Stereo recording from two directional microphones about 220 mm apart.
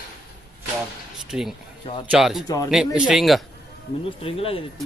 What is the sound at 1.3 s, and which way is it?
Speech, 5° right (ahead or behind).